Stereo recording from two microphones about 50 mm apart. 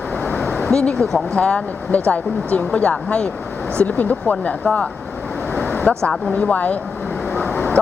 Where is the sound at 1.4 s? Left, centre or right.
Left.